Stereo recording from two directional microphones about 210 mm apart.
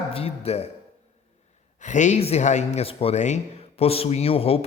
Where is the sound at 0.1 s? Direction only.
30° left (ahead or behind).